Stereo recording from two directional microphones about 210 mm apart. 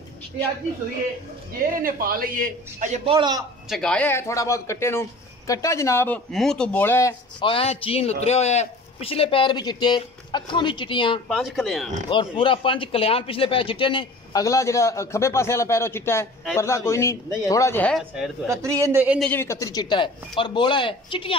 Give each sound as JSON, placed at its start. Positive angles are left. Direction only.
{"t": 1.8, "sound": "a man's voice", "side_deg": -45}
{"t": 3.6, "sound": "speech", "side_deg": 0}
{"t": 11.2, "sound": "speech", "side_deg": 0}
{"t": 12.1, "sound": "speech", "side_deg": 25}
{"t": 18.5, "sound": "a man's voice", "side_deg": -15}
{"t": 19.1, "sound": "speech", "side_deg": 10}